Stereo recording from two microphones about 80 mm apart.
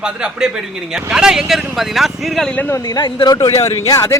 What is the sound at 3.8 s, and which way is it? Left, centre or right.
Speech, left.